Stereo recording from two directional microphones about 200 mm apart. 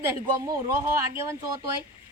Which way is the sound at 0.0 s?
15° right (ahead or behind).